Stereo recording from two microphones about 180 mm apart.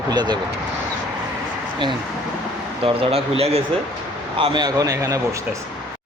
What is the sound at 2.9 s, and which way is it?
Speech, 30° right (ahead or behind).